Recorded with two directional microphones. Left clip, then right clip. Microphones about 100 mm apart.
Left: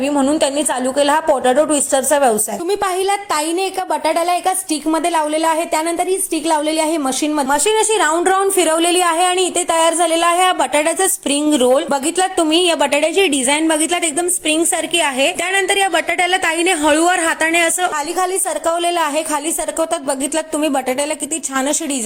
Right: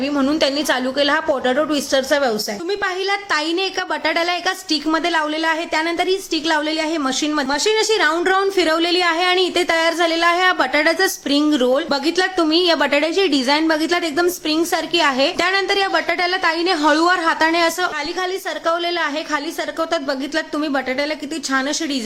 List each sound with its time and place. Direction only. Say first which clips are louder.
0.1 s a woman's voice: left 2 dB; 10° right (ahead or behind)
2.6 s a woman's voice: left 4 dB; 30° left (ahead or behind)
7.0 s speech: left 2 dB; 15° left (ahead or behind)
8.3 s a woman's voice: left 2 dB; centre (ahead or behind)
11.5 s a woman's voice: left 3 dB; centre (ahead or behind)
12.9 s a woman's voice: left 2 dB; 15° left (ahead or behind)
15.2 s a woman's voice: left 1 dB; 20° left (ahead or behind)
16.8 s speech: even; 10° left (ahead or behind)
17.2 s a woman's voice: left 1 dB; 25° left (ahead or behind)
18.6 s a woman's voice: left 2 dB; 10° left (ahead or behind); by 21.8 s 25° left (ahead or behind)